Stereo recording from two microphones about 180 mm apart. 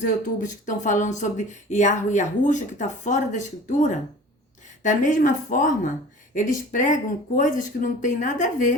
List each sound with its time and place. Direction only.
0.0 s speech: 45° left (ahead or behind)